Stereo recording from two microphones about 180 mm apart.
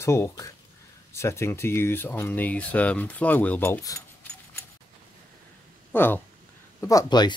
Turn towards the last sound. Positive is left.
turn(degrees=25)  # may be behind; listen again after turning